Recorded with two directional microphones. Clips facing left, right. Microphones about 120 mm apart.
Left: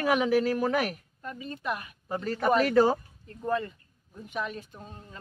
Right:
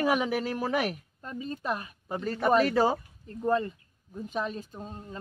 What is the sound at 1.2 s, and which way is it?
Speech, 30° right (ahead or behind).